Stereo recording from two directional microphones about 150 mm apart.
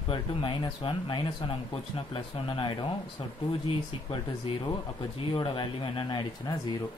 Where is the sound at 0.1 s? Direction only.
30° left (ahead or behind).